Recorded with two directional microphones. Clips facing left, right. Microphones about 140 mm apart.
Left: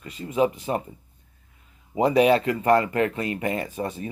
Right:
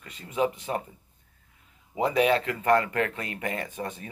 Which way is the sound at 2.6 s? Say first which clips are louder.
Left 1 dB; 15° left (ahead or behind).